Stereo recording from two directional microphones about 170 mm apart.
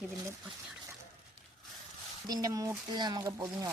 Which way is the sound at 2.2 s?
20° right (ahead or behind).